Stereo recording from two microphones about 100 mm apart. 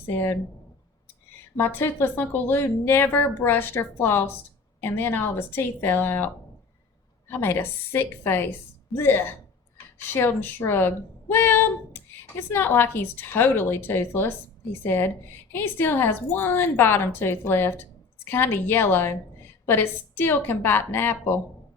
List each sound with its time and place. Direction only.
0.1 s a woman's voice: 20° left (ahead or behind)
1.5 s a woman's voice: 20° left (ahead or behind)